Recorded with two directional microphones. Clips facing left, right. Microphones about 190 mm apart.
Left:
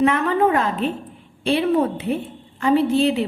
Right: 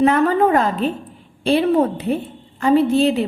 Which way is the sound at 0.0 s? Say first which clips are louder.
Right 3 dB; 40° right (ahead or behind).